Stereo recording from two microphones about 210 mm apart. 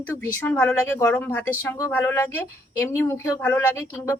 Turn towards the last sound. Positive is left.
turn(degrees=15)  # may be behind; listen again after turning